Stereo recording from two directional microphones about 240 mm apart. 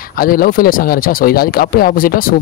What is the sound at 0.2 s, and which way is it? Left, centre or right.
Speech, left.